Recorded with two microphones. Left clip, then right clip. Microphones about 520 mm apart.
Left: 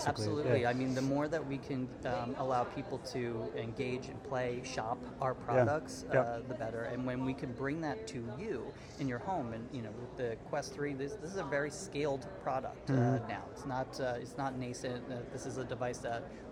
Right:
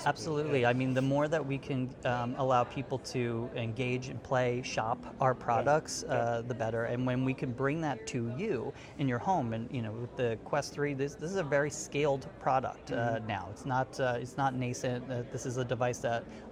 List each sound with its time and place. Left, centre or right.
0.1 s speech: right
3.8 s speech: right